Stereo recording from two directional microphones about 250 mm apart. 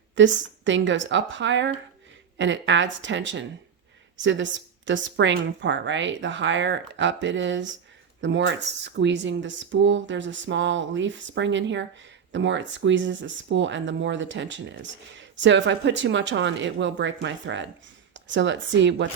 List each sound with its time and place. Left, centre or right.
0.2 s speech: right